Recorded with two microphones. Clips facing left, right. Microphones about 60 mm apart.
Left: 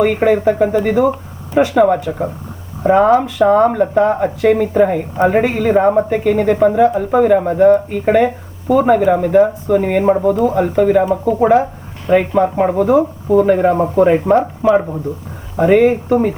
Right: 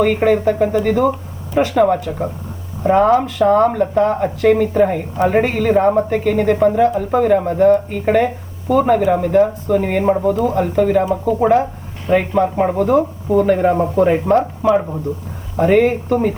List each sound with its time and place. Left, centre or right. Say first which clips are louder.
0.0 s speech: left 1 dB; centre
11.5 s a sound: left 2 dB; centre
12.4 s speech: left 2 dB; centre